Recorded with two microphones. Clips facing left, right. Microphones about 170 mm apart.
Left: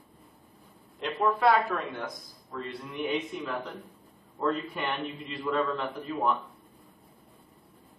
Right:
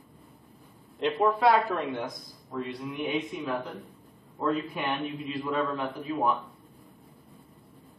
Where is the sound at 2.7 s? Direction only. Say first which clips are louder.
Left 1 dB; centre (ahead or behind).